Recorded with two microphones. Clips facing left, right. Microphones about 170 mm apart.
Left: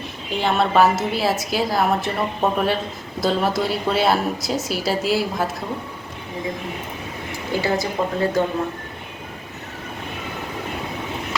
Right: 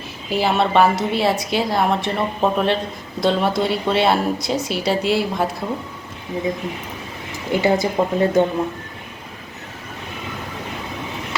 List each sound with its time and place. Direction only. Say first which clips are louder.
0.3 s a woman's voice: right 2 dB; 5° right (ahead or behind)
7.5 s speech: right 4 dB; 20° right (ahead or behind)